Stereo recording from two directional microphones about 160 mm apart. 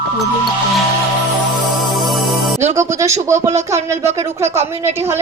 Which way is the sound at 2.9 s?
20° right (ahead or behind).